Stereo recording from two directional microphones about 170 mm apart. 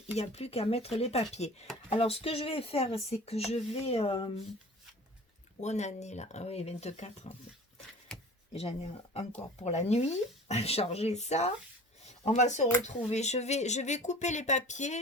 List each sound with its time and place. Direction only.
0.2 s speech: 35° left (ahead or behind)
5.5 s speech: 40° left (ahead or behind)
8.5 s speech: 35° left (ahead or behind)